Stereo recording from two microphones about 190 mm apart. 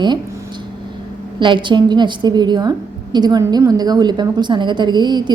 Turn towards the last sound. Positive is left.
turn(degrees=-25)  # may be behind; listen again after turning